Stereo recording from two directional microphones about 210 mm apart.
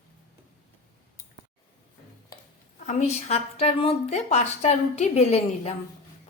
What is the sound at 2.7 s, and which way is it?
A woman's voice, 35° left (ahead or behind).